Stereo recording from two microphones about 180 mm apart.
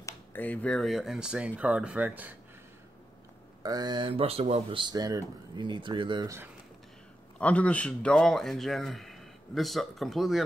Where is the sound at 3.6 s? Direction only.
20° right (ahead or behind).